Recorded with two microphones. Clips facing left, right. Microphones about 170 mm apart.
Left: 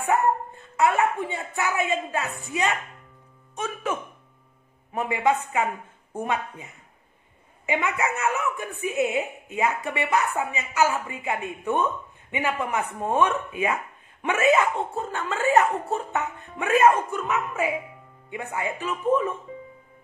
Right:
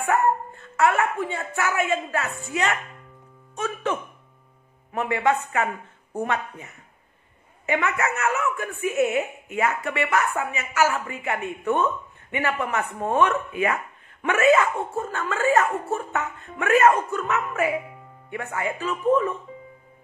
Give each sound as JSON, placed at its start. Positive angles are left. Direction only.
{"t": 0.0, "sound": "a woman's voice", "side_deg": 15}